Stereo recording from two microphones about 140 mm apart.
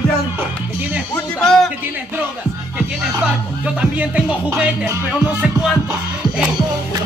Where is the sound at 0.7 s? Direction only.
10° right (ahead or behind).